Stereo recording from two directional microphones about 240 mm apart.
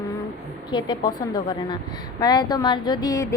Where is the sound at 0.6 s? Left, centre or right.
Centre.